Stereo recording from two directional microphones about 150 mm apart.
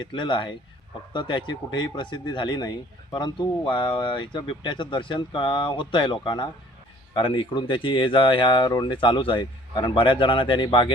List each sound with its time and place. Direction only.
0.0 s speech: 30° left (ahead or behind)